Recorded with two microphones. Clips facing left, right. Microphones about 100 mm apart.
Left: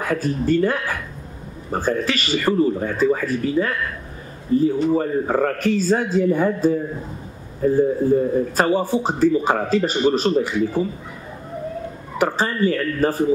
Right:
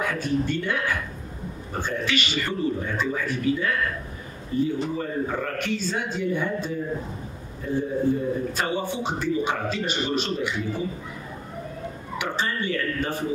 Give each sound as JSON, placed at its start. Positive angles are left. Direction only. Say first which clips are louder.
{"t": 0.0, "sound": "a man's voice", "louder": "left 3 dB", "side_deg": 40}
{"t": 12.2, "sound": "a man's voice", "louder": "left 8 dB", "side_deg": 40}